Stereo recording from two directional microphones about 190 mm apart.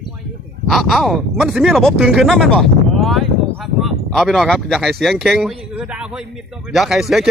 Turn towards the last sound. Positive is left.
turn(degrees=0)  # may be behind; listen again after turning